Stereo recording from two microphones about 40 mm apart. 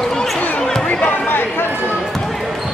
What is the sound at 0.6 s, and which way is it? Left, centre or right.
Basketball bounce, centre.